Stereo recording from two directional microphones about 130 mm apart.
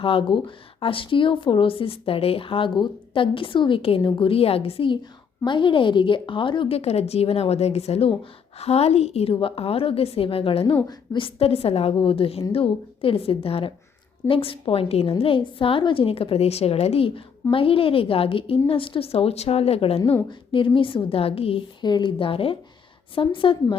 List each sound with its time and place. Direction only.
0.0 s a woman's voice: 45° left (ahead or behind)